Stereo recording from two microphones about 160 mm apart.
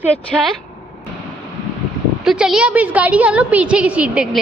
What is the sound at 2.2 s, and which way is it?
A woman's voice, centre (ahead or behind).